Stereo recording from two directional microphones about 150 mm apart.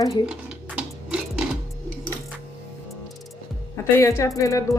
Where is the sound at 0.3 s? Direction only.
5° right (ahead or behind).